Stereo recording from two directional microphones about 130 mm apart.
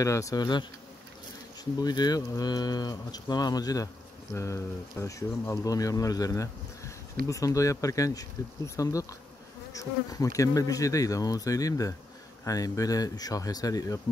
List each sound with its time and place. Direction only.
0.0 s speech: 25° left (ahead or behind)